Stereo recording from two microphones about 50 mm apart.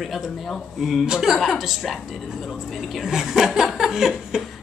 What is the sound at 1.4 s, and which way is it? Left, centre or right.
Speech, centre.